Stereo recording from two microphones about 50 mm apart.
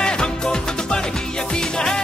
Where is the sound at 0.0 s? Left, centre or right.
Centre.